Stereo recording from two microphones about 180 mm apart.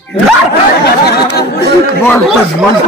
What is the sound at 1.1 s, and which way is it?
Speech, 65° left (ahead or behind).